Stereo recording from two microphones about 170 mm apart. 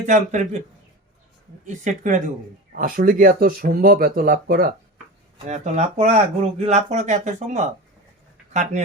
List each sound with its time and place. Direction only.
0.1 s speech: 45° right (ahead or behind)
1.6 s speech: 45° right (ahead or behind)
5.5 s speech: 40° right (ahead or behind)